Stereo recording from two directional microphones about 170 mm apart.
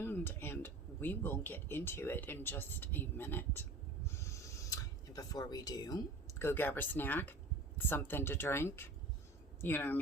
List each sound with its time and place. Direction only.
0.0 s speech: 15° left (ahead or behind)
4.0 s a sound: 15° left (ahead or behind)
7.9 s speech: 15° left (ahead or behind)